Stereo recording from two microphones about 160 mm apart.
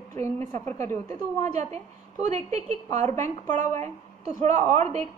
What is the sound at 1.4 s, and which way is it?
A woman's voice, 45° right (ahead or behind).